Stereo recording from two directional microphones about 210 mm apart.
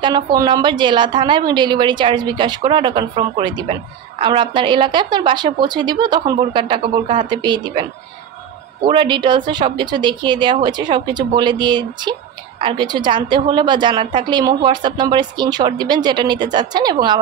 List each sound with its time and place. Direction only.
0.0 s speech: 20° right (ahead or behind)
8.8 s speech: 20° right (ahead or behind)